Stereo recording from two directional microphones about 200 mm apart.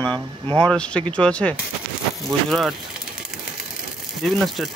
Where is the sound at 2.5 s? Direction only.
Centre (ahead or behind).